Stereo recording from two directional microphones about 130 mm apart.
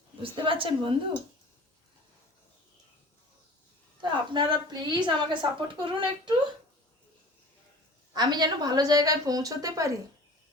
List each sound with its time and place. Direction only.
0.2 s a woman's voice: 40° right (ahead or behind)
4.0 s a sound: 40° right (ahead or behind)
4.5 s speech: 35° right (ahead or behind)
8.1 s a woman's voice: 35° right (ahead or behind)